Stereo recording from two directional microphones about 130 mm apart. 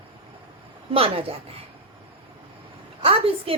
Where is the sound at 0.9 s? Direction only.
45° right (ahead or behind).